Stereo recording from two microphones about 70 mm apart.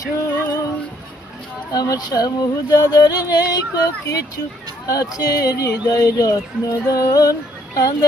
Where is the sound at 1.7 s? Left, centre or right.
Left.